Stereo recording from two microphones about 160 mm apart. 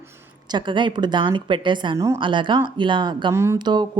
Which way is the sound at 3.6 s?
25° right (ahead or behind).